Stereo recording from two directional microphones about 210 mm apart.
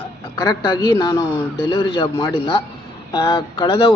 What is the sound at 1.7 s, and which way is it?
A man's voice, 25° left (ahead or behind).